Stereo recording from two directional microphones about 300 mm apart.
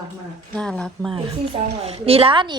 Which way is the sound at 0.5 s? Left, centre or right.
Centre.